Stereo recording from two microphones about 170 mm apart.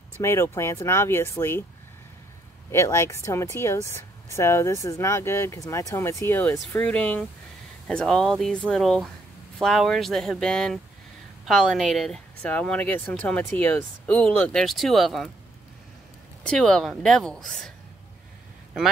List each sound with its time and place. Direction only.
0.2 s speech: 15° left (ahead or behind)
2.7 s speech: 15° left (ahead or behind); by 15.3 s centre (ahead or behind)
16.4 s speech: 5° left (ahead or behind)